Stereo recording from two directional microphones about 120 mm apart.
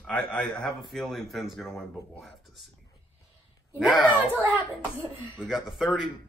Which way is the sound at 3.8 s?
Centre (ahead or behind).